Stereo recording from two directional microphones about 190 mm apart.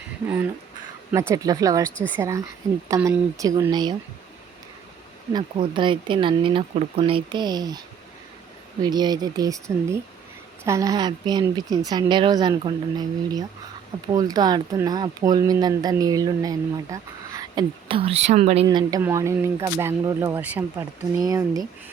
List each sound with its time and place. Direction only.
1.3 s speech: 20° right (ahead or behind)
5.3 s speech: 25° right (ahead or behind)
8.8 s speech: 20° right (ahead or behind)
18.8 s speech: 20° right (ahead or behind)